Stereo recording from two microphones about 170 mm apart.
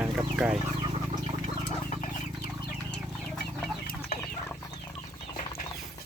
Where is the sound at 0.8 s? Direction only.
35° right (ahead or behind).